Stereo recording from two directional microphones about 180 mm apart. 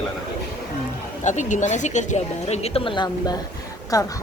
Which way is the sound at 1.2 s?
40° left (ahead or behind).